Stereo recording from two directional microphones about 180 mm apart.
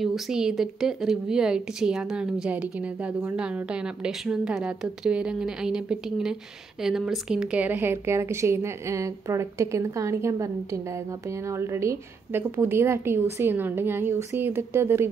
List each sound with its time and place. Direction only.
0.0 s a woman's voice: centre (ahead or behind)